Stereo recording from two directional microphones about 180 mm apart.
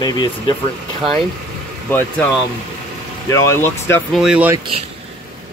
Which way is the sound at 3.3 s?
15° left (ahead or behind).